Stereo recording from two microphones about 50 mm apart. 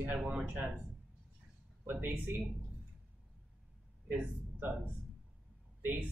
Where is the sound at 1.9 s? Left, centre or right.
Right.